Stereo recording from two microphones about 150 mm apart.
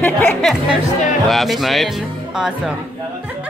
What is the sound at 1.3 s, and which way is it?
Speech, centre (ahead or behind).